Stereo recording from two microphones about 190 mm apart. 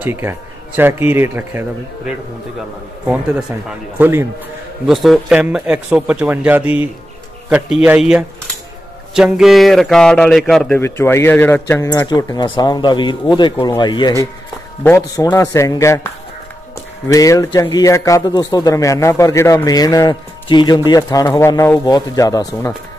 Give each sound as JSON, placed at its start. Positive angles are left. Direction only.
{"t": 0.0, "sound": "a man's voice", "side_deg": -10}
{"t": 4.0, "sound": "a man's voice", "side_deg": -10}
{"t": 4.8, "sound": "a man's voice", "side_deg": 0}
{"t": 10.8, "sound": "a man's voice", "side_deg": 15}
{"t": 17.1, "sound": "a man's voice", "side_deg": 20}